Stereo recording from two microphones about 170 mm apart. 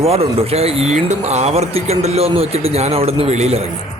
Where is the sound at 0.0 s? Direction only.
35° right (ahead or behind).